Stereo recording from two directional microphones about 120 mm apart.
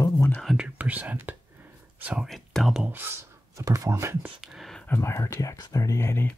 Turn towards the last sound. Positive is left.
turn(degrees=20)  # may be behind; listen again after turning